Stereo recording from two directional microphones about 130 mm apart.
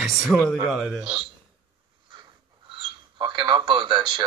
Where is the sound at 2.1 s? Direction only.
40° right (ahead or behind).